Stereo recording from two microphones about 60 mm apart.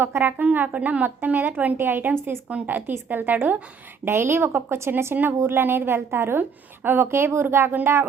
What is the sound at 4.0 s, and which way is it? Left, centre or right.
A woman's voice, right.